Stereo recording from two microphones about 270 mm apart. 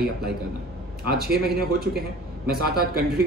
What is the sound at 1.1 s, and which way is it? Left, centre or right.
Speech, right.